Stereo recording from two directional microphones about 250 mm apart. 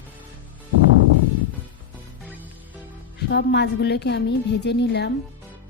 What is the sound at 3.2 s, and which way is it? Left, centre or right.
A woman's voice, left.